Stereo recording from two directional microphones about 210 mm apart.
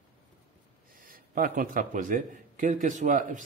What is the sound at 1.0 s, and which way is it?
Speech, 40° right (ahead or behind).